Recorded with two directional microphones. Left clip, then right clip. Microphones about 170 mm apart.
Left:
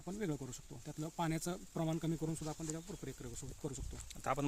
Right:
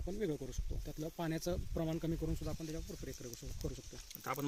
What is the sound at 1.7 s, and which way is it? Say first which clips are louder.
Speech: even; 50° left (ahead or behind).